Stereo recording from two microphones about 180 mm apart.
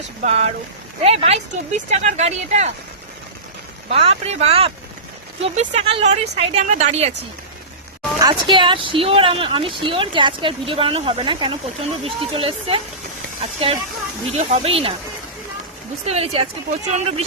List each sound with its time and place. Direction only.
0.2 s speech: 35° right (ahead or behind)
3.8 s speech: 30° right (ahead or behind)
8.2 s speech: 25° right (ahead or behind)
16.0 s speech: 35° right (ahead or behind)